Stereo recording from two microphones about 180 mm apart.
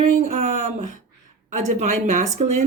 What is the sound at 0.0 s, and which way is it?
Speech, 40° right (ahead or behind).